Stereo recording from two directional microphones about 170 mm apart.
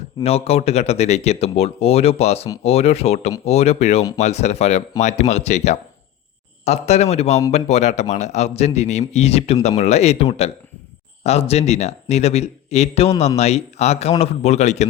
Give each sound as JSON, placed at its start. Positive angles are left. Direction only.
{"t": 0.2, "sound": "speech", "side_deg": 35}